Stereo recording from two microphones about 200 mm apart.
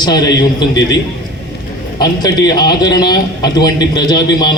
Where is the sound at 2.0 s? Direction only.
20° left (ahead or behind).